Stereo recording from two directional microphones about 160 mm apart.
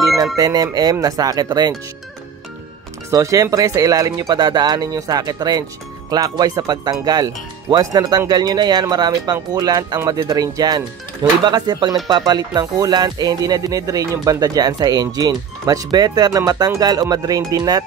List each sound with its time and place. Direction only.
0.4 s speech: 20° right (ahead or behind)
3.1 s speech: 20° right (ahead or behind)